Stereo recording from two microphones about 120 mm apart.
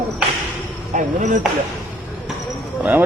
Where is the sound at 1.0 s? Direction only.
90° right.